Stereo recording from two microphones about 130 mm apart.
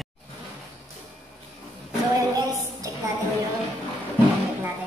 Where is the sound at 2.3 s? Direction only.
25° right (ahead or behind).